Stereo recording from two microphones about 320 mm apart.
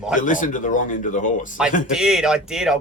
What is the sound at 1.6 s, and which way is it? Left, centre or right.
Speech, centre.